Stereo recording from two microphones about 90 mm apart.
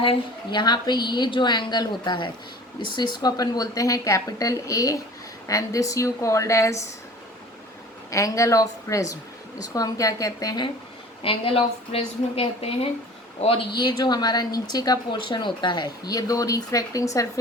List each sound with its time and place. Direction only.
0.5 s a woman's voice: 55° left (ahead or behind); by 6.8 s 35° left (ahead or behind)
8.1 s speech: 35° left (ahead or behind)
11.2 s a woman's voice: 90° left
13.7 s speech: 50° left (ahead or behind)